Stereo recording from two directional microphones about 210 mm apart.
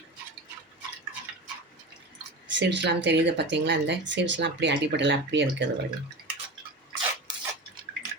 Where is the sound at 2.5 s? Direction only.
55° right (ahead or behind).